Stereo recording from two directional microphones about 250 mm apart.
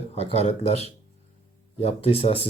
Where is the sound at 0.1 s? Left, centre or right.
Left.